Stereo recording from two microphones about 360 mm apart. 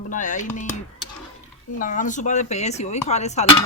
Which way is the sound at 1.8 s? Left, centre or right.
Left.